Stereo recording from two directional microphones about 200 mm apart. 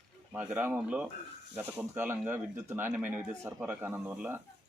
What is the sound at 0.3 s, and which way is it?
Speech, 10° right (ahead or behind).